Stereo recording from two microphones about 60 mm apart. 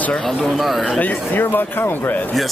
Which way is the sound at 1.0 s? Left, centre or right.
Left.